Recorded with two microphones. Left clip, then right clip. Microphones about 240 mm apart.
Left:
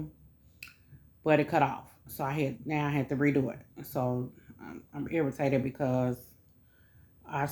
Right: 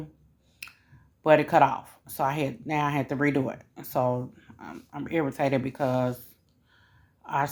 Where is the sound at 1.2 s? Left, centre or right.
Right.